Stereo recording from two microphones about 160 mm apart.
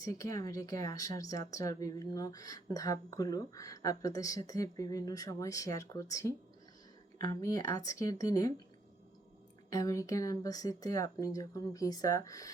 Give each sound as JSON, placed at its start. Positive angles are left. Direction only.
{"t": 0.0, "sound": "speech", "side_deg": 20}
{"t": 9.6, "sound": "speech", "side_deg": 20}